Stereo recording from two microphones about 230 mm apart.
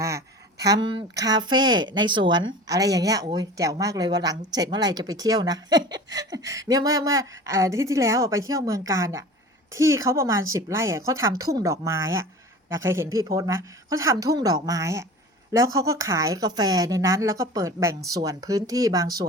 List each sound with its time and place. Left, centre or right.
0.7 s a woman's voice: centre